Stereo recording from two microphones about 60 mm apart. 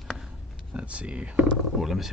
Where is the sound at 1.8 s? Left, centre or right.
Centre.